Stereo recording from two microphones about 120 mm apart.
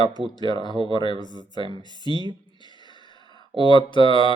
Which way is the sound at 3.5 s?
40° left (ahead or behind).